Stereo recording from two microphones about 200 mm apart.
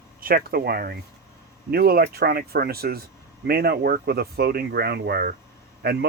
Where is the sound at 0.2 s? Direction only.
45° right (ahead or behind).